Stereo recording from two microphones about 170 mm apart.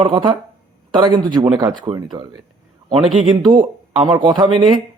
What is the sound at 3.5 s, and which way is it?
Speech, 25° right (ahead or behind).